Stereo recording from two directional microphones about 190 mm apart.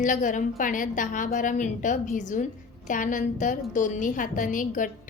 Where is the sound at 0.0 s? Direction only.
40° left (ahead or behind).